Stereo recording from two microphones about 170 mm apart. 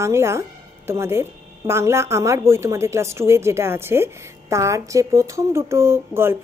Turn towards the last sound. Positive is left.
turn(degrees=-15)  # may be behind; listen again after turning